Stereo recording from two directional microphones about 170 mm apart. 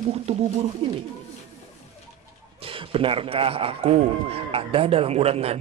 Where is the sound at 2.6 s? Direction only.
30° right (ahead or behind).